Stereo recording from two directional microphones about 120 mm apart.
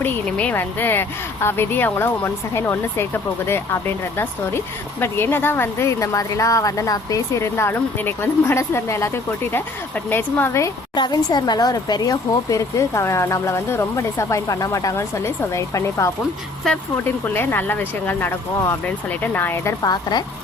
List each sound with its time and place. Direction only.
0.0 s speech: 10° left (ahead or behind)
10.9 s speech: 35° left (ahead or behind)
16.7 s speech: 5° left (ahead or behind)
17.2 s speech: 15° left (ahead or behind)
19.8 s speech: 35° left (ahead or behind)